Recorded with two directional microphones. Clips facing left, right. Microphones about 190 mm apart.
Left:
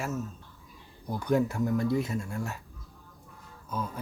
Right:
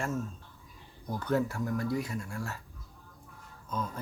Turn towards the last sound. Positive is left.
turn(degrees=10)  # may be behind; listen again after turning